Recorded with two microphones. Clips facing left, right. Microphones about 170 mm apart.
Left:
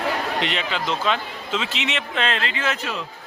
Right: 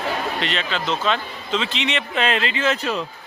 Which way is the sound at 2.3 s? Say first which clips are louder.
Right 4 dB; 20° right (ahead or behind).